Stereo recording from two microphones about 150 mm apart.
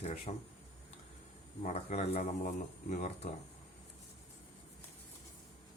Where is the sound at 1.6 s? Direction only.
50° left (ahead or behind).